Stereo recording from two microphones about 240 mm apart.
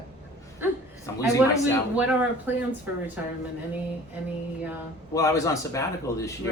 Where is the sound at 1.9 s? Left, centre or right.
Centre.